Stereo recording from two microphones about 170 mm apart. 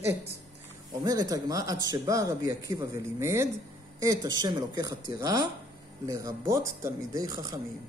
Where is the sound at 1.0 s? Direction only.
20° right (ahead or behind).